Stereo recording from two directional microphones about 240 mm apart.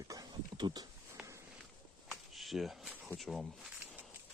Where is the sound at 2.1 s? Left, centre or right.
Centre.